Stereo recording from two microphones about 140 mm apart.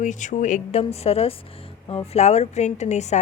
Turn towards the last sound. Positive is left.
turn(degrees=55)  # may be behind; listen again after turning